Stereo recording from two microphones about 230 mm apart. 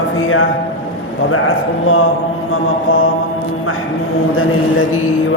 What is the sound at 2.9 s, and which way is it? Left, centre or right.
Speech, left.